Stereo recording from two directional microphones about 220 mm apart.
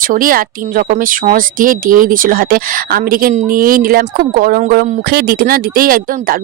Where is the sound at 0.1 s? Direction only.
40° right (ahead or behind).